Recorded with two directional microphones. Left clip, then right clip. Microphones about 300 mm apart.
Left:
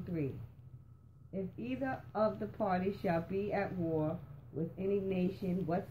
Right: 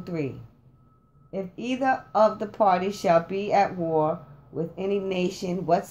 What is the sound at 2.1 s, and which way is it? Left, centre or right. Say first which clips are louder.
Speech: right 12 dB; right.